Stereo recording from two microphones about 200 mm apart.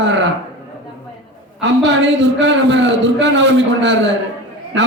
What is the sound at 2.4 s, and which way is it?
A man's voice, 65° right (ahead or behind).